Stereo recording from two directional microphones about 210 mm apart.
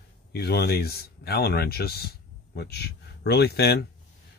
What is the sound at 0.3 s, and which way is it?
Speech, 50° left (ahead or behind).